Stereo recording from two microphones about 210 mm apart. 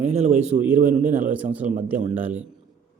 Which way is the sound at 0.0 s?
30° right (ahead or behind).